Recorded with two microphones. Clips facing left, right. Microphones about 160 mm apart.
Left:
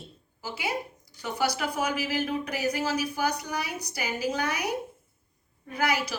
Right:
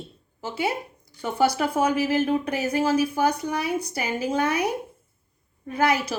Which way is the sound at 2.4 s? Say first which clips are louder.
Right 5 dB; 25° right (ahead or behind).